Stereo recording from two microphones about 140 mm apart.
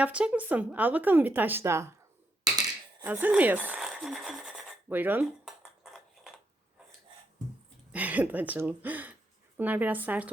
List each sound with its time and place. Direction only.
0.0 s a woman's voice: 10° right (ahead or behind)
3.0 s speech: 15° right (ahead or behind)
5.2 s dishes: 5° right (ahead or behind)
7.9 s a woman's voice: 10° right (ahead or behind)